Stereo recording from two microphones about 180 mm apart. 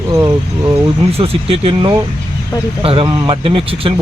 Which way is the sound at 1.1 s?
30° right (ahead or behind).